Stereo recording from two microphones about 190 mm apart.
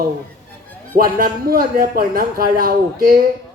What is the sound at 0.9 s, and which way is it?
Speech, 50° right (ahead or behind).